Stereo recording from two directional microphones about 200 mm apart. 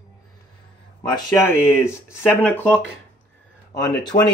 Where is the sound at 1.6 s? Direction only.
10° left (ahead or behind).